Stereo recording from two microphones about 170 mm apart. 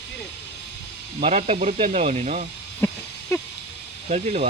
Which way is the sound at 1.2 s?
40° right (ahead or behind).